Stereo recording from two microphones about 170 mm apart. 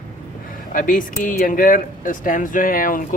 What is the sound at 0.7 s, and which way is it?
Speech, 50° left (ahead or behind).